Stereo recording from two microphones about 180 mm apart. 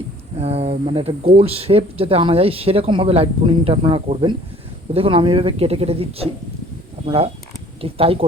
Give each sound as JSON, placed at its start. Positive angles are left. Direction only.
{"t": 0.3, "sound": "speech", "side_deg": -35}